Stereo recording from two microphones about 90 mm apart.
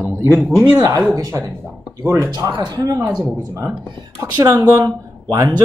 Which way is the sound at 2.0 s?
40° right (ahead or behind).